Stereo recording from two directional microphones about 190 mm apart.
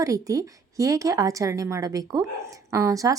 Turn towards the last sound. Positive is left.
turn(degrees=-15)  # may be behind; listen again after turning